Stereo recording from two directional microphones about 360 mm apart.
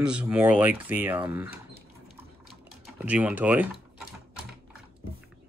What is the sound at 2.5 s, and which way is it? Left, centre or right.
Typing, centre.